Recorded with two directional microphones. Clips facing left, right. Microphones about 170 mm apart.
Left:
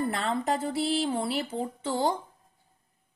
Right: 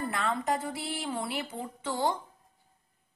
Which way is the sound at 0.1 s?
30° left (ahead or behind).